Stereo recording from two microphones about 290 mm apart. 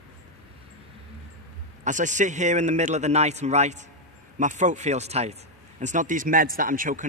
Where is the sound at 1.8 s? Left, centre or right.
Right.